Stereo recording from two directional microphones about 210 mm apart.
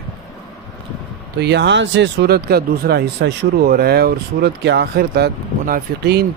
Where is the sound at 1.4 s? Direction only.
55° right (ahead or behind).